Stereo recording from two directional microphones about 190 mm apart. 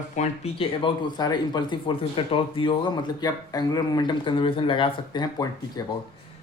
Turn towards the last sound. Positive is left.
turn(degrees=20)  # may be behind; listen again after turning